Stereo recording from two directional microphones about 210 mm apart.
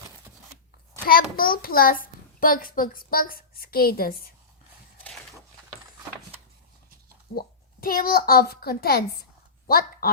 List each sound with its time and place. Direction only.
1.4 s a child's voice: 45° left (ahead or behind)
7.3 s a child's voice: 45° left (ahead or behind)